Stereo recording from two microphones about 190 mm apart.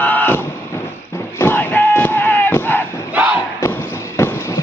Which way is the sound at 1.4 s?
10° left (ahead or behind).